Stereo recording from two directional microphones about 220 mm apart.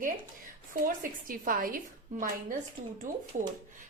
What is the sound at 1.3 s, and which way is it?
A woman's voice, 40° right (ahead or behind).